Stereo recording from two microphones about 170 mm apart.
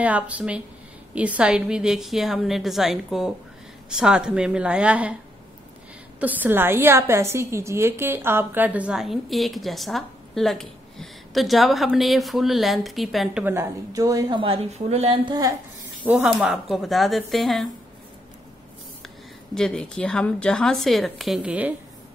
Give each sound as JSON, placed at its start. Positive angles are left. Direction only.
{"t": 0.0, "sound": "a woman's voice", "side_deg": -10}
{"t": 6.1, "sound": "a woman's voice", "side_deg": -10}
{"t": 14.4, "sound": "a woman's voice", "side_deg": -35}
{"t": 16.0, "sound": "a woman's voice", "side_deg": -5}
{"t": 19.0, "sound": "a woman's voice", "side_deg": 5}